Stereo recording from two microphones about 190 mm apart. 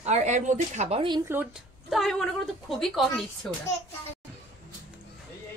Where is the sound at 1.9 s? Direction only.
Centre (ahead or behind).